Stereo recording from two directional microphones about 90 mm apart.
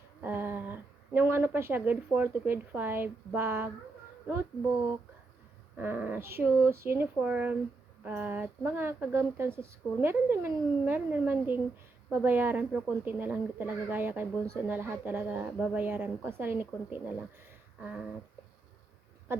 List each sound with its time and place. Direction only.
0.2 s a woman's voice: 20° right (ahead or behind)
5.7 s speech: 20° right (ahead or behind)
7.2 s a sound: 20° right (ahead or behind)
8.0 s speech: 20° right (ahead or behind)
17.7 s a sound: 10° right (ahead or behind)
19.3 s speech: 25° right (ahead or behind)